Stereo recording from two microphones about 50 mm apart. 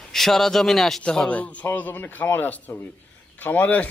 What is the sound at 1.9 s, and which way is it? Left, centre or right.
Speech, left.